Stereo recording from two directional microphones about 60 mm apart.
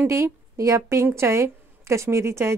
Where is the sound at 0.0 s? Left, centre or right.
Right.